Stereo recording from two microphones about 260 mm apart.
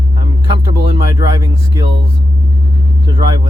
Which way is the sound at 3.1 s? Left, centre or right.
Centre.